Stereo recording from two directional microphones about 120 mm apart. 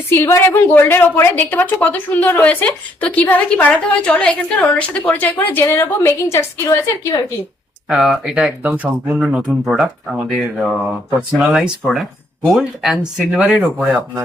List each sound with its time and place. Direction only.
0.1 s a woman's voice: 20° left (ahead or behind)
7.9 s speech: 5° right (ahead or behind)
11.8 s speech: 5° left (ahead or behind)